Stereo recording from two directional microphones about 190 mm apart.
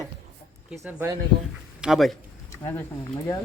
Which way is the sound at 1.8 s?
Centre (ahead or behind).